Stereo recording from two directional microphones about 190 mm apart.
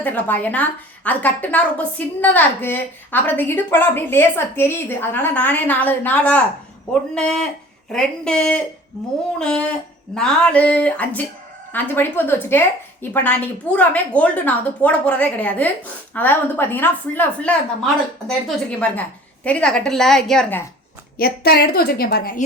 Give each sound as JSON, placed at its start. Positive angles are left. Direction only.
{"t": 0.0, "sound": "a woman's voice", "side_deg": 10}
{"t": 21.2, "sound": "a woman's voice", "side_deg": 55}